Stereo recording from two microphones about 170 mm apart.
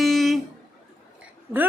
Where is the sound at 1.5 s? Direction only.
15° right (ahead or behind).